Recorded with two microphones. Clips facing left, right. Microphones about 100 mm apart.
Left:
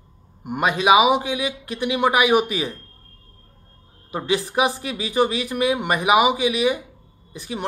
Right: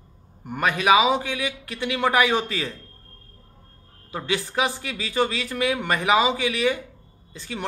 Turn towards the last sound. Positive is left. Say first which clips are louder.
# left 3 dB
turn(degrees=20)  # may be behind; listen again after turning